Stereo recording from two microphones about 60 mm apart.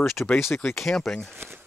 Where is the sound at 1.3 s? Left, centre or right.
Right.